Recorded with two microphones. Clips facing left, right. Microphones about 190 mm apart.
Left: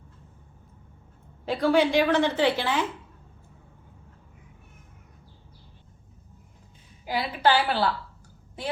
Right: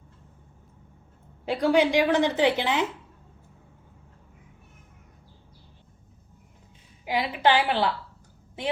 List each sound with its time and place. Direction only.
1.5 s a woman's voice: 15° right (ahead or behind)
7.0 s a woman's voice: 20° right (ahead or behind)